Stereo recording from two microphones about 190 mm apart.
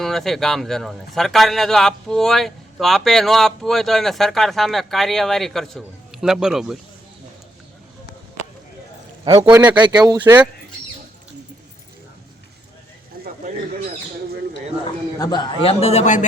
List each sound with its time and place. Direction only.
0.0 s a man's voice: centre (ahead or behind)
9.2 s a man's voice: 20° right (ahead or behind)
13.2 s a sound: 50° right (ahead or behind)
15.2 s a man's voice: 20° left (ahead or behind)